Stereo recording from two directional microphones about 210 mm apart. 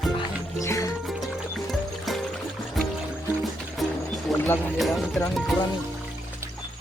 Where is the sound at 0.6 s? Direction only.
15° left (ahead or behind).